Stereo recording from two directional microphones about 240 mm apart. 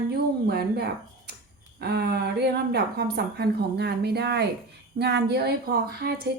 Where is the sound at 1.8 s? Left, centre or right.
Right.